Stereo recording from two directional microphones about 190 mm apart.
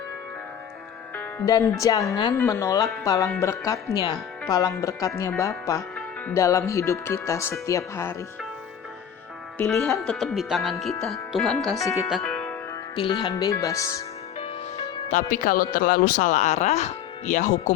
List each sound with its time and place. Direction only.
1.1 s speech: 15° left (ahead or behind)
9.6 s speech: 5° left (ahead or behind)
11.8 s speech: 15° left (ahead or behind)
12.0 s music: centre (ahead or behind)
13.0 s speech: 25° left (ahead or behind)
14.3 s music: 30° left (ahead or behind)
15.3 s speech: 45° left (ahead or behind)